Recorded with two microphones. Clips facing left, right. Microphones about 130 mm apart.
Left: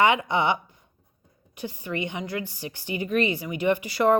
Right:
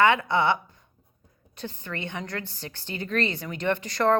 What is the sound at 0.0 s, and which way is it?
A woman's voice, 15° left (ahead or behind).